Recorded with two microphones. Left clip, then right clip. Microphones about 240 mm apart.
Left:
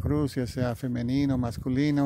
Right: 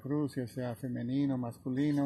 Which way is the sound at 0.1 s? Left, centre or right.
Left.